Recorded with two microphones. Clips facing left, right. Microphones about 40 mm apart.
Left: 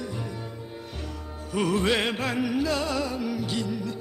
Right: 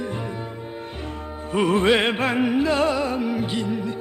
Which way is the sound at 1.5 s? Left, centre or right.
Right.